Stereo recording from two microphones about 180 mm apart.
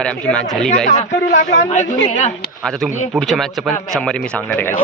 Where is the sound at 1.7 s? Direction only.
40° left (ahead or behind).